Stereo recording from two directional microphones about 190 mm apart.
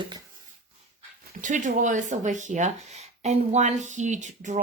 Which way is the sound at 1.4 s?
40° right (ahead or behind).